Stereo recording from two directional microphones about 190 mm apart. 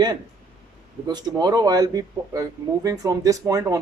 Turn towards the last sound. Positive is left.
turn(degrees=-20)  # may be behind; listen again after turning